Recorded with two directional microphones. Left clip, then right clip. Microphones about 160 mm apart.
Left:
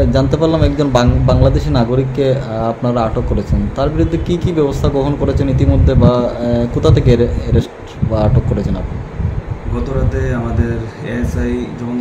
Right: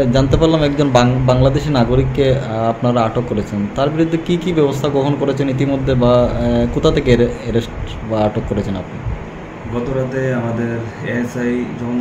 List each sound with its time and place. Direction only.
0.0 s a man's voice: 5° left (ahead or behind)